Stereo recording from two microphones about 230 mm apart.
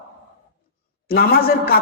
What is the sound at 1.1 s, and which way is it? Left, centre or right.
Speech, left.